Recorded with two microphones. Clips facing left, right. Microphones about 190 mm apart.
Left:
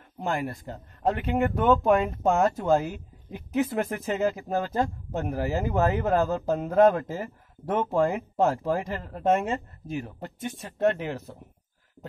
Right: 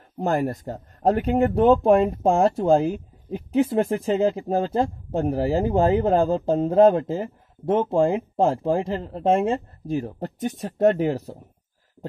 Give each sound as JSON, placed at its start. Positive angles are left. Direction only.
{"t": 0.2, "sound": "speech", "side_deg": -40}